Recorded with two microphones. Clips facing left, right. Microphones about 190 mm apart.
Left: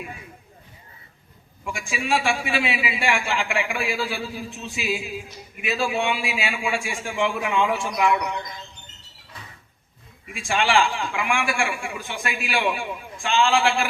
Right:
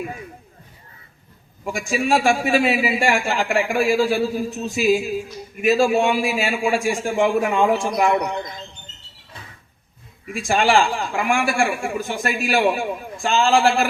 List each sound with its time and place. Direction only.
1.6 s a man's voice: 40° right (ahead or behind)
10.2 s a man's voice: 45° right (ahead or behind)